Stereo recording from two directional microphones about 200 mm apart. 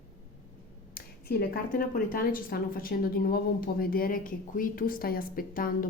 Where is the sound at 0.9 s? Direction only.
45° left (ahead or behind).